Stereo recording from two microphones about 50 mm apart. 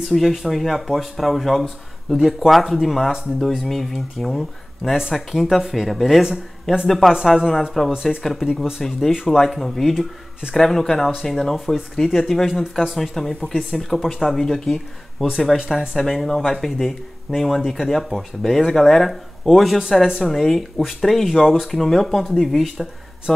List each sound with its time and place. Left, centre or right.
0.0 s speech: centre
4.9 s speech: centre
7.9 s speech: centre
8.8 s speech: centre
9.1 s speech: centre